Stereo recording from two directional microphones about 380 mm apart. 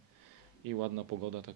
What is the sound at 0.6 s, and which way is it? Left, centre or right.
Speech, right.